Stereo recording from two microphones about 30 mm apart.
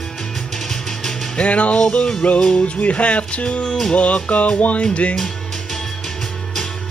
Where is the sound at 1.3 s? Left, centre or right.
Left.